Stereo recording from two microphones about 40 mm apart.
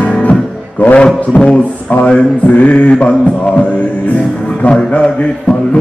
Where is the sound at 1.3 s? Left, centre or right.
Left.